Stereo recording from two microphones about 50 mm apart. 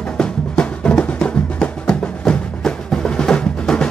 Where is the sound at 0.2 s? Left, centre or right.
Left.